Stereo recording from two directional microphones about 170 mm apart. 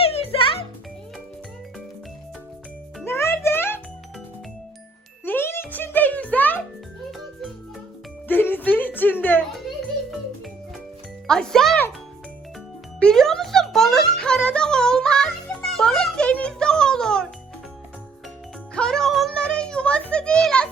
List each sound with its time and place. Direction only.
0.0 s music: 35° left (ahead or behind)
3.0 s music: 15° left (ahead or behind)
5.2 s jingle: 10° left (ahead or behind)
5.7 s music: 10° left (ahead or behind)
8.3 s a sound: 10° left (ahead or behind)
11.3 s music: 5° left (ahead or behind)
13.0 s music: 5° left (ahead or behind)
18.7 s music: 5° left (ahead or behind)